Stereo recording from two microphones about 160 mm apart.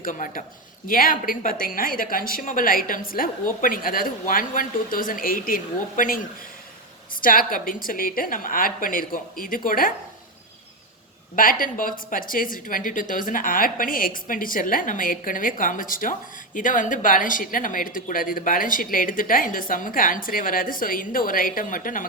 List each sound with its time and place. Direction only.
0.0 s speech: 60° left (ahead or behind)
7.2 s speech: 60° left (ahead or behind)
11.3 s speech: 60° left (ahead or behind)